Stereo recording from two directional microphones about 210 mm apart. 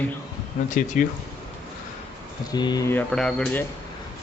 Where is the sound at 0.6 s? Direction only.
40° left (ahead or behind).